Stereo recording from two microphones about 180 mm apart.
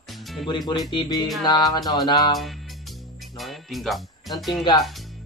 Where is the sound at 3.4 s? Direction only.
Centre (ahead or behind).